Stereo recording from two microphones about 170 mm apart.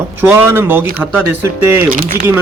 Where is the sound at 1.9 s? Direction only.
55° right (ahead or behind).